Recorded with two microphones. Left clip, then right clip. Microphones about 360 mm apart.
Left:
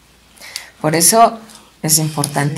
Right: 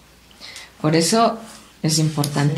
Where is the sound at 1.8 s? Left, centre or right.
Centre.